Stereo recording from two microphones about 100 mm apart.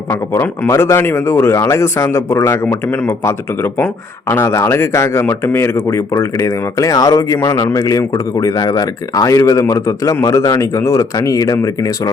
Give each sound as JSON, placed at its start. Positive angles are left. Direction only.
{"t": 0.7, "sound": "a man's voice", "side_deg": 30}